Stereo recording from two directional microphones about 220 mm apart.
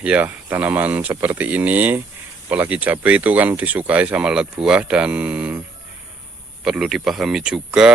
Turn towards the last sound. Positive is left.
turn(degrees=-5)  # may be behind; listen again after turning